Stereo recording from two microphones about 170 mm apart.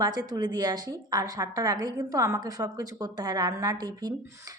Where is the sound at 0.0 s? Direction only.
25° right (ahead or behind).